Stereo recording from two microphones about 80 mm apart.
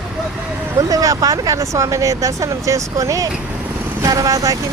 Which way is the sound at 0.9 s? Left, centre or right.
Right.